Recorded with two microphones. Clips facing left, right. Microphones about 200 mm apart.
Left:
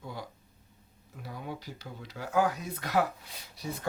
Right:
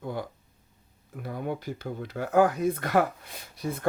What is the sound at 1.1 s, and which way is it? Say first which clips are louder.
Speech: right 8 dB; 55° right (ahead or behind).